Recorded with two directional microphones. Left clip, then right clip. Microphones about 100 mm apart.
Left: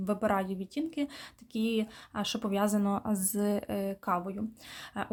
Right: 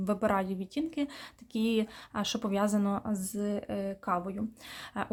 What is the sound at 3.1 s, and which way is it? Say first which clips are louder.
Speech: left 3 dB; 30° left (ahead or behind).